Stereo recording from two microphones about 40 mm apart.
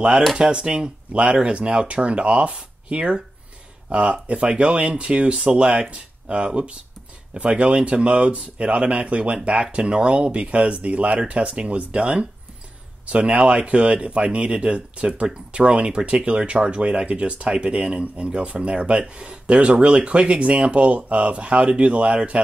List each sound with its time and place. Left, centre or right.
0.4 s speech: right